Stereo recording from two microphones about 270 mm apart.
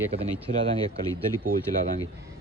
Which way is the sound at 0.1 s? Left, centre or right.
Right.